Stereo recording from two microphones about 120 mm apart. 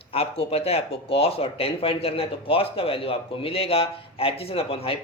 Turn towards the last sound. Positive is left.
turn(degrees=55)  # may be behind; listen again after turning